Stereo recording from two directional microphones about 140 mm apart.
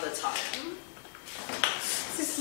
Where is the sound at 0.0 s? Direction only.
20° left (ahead or behind).